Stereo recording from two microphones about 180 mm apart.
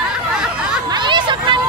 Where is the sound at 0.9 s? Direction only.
25° right (ahead or behind).